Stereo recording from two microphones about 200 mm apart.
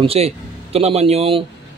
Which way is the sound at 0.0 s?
30° right (ahead or behind).